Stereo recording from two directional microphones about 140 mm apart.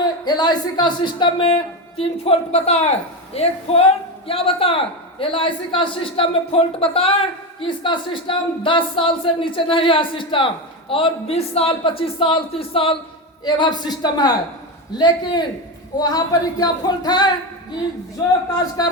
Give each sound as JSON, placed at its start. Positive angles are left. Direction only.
{"t": 0.0, "sound": "a woman's voice", "side_deg": 30}
{"t": 13.4, "sound": "a woman's voice", "side_deg": 30}